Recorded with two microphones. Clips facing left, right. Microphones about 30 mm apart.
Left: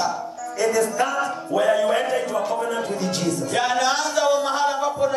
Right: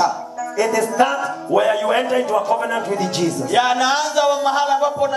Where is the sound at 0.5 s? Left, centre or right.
Centre.